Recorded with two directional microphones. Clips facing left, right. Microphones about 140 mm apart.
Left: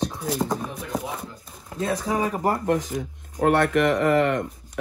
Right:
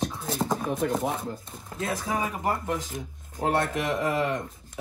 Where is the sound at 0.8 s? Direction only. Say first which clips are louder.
Right 6 dB; 50° right (ahead or behind).